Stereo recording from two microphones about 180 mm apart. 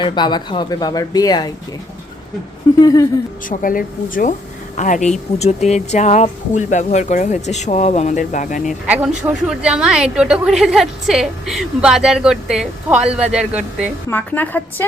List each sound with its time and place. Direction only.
0.0 s speech: 25° left (ahead or behind)
2.8 s speech: 20° left (ahead or behind)
3.5 s speech: 50° left (ahead or behind)
8.9 s a woman's voice: 10° right (ahead or behind)
14.1 s a woman's voice: 10° left (ahead or behind)